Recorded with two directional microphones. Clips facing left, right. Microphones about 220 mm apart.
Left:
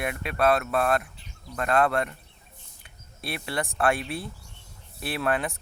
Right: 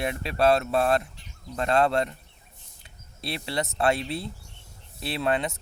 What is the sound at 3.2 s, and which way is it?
Speech, 25° right (ahead or behind).